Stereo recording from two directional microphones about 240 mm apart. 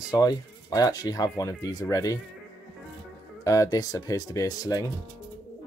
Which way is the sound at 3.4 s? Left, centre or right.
Centre.